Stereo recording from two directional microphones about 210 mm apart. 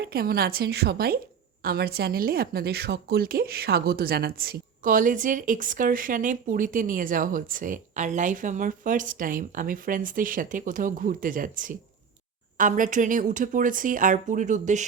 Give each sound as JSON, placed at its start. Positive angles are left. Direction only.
{"t": 0.0, "sound": "a woman's voice", "side_deg": -45}